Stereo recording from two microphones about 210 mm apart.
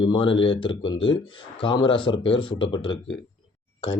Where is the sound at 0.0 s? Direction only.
25° left (ahead or behind).